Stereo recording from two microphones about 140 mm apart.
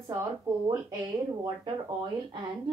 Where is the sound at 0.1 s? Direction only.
20° right (ahead or behind).